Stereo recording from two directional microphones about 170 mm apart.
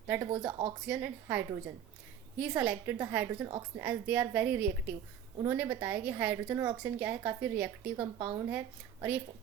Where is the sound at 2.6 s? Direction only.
10° right (ahead or behind).